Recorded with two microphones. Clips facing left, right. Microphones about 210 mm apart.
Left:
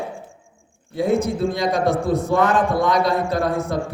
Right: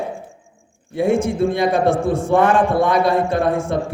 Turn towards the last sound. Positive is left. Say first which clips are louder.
# right 3 dB
turn(degrees=-25)  # may be behind; listen again after turning